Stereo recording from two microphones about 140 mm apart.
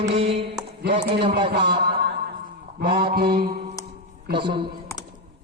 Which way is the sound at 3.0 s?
90° right.